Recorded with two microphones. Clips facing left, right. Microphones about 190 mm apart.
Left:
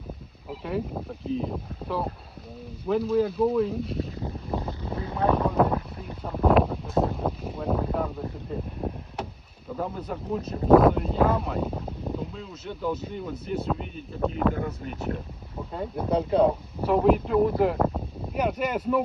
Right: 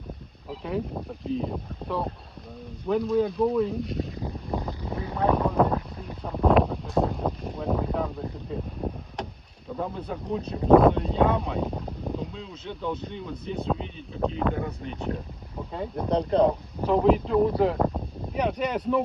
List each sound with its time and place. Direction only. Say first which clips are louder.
1.2 s speech: even; centre (ahead or behind)
4.8 s speech: even; 15° right (ahead or behind)
5.5 s a sound: even; 5° left (ahead or behind)
6.2 s speech: even; 5° left (ahead or behind)
8.8 s a sound: even; 5° left (ahead or behind)
9.7 s speech: even; 5° left (ahead or behind)